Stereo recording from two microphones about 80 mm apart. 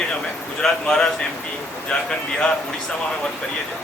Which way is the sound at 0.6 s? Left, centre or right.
Centre.